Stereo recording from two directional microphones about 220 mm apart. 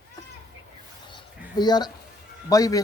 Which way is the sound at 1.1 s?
20° left (ahead or behind).